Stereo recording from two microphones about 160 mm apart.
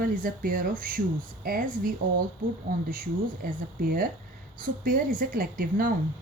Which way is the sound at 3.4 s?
65° right (ahead or behind).